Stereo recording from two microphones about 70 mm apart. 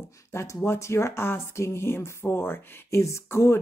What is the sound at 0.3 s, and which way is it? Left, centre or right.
Speech, left.